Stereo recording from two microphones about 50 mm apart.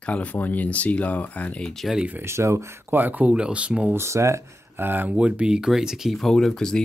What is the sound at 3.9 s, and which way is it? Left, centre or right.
Speech, right.